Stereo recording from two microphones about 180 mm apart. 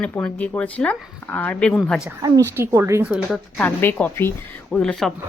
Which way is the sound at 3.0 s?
Centre (ahead or behind).